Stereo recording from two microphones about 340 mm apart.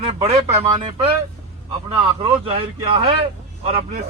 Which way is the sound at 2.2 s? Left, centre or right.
Centre.